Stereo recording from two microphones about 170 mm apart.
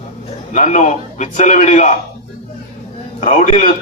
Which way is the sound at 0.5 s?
45° left (ahead or behind).